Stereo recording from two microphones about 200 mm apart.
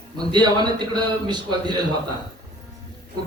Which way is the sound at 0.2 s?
20° right (ahead or behind).